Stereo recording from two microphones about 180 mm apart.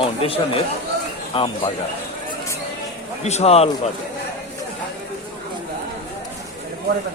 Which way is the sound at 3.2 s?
40° left (ahead or behind).